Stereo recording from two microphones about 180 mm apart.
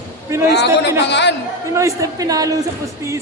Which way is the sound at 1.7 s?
15° right (ahead or behind).